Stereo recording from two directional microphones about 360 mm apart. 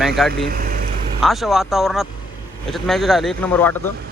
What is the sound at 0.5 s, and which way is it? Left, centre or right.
Vehicle, right.